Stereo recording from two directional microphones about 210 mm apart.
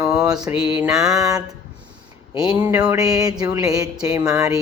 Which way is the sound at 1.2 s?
15° right (ahead or behind).